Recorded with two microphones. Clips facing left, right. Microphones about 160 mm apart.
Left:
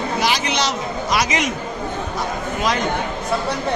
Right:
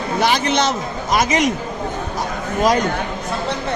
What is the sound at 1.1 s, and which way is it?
Speech, 45° right (ahead or behind).